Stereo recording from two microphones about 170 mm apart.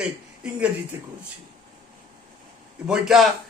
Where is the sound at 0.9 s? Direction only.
20° right (ahead or behind).